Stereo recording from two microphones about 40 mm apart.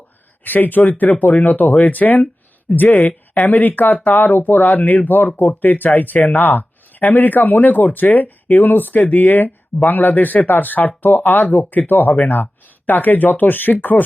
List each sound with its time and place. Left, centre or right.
0.4 s speech: left